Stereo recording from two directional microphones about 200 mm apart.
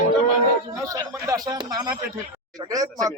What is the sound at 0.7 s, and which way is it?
Speech, 15° right (ahead or behind).